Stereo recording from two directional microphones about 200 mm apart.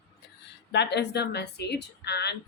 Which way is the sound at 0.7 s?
60° left (ahead or behind).